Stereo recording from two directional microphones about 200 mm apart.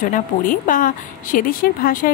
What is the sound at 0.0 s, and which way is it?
A woman's voice, 45° left (ahead or behind).